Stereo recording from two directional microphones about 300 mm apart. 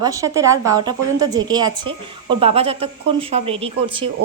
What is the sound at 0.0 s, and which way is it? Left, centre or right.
A woman's voice, centre.